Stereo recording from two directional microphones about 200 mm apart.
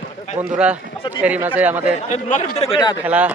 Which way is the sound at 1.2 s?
10° right (ahead or behind).